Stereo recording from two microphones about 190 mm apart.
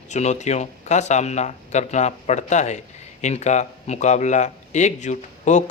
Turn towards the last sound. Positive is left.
turn(degrees=40)  # may be behind; listen again after turning